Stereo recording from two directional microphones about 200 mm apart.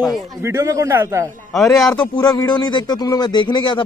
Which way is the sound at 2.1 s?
20° left (ahead or behind).